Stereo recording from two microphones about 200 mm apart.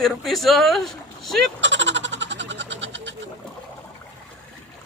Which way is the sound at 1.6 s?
65° right (ahead or behind).